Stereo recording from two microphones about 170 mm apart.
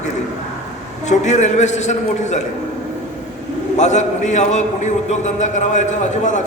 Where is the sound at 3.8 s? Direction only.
45° left (ahead or behind).